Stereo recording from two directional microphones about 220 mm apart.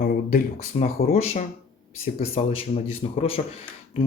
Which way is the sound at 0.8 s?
30° left (ahead or behind).